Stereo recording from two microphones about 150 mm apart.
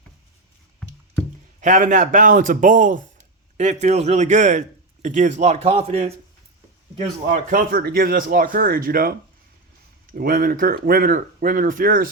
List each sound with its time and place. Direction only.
1.6 s a man's voice: 55° right (ahead or behind)
7.3 s speech: 70° right (ahead or behind)